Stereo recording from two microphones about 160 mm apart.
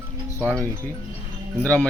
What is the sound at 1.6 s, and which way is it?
Speech, 5° left (ahead or behind).